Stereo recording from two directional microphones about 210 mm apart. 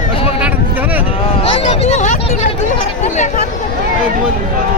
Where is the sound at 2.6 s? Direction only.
35° left (ahead or behind).